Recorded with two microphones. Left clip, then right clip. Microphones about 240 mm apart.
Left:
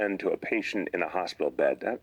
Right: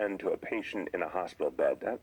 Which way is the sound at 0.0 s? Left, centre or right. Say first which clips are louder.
Left 4 dB; left.